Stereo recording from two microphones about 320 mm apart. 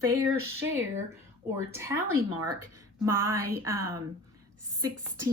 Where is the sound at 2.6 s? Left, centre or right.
Right.